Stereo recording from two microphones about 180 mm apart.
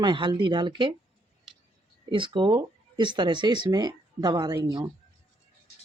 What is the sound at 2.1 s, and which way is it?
Speech, 25° right (ahead or behind).